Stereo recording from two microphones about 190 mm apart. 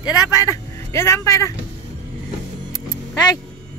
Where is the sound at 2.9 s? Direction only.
20° left (ahead or behind).